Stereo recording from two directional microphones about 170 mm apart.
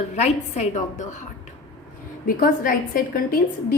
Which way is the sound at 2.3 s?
55° left (ahead or behind).